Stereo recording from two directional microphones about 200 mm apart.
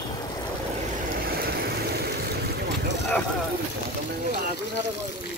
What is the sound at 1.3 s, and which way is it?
Vehicle, 50° right (ahead or behind).